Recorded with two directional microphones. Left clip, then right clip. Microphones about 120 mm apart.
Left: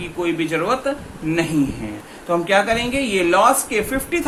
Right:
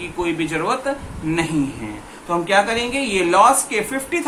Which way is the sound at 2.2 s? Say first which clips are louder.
Even; 30° left (ahead or behind).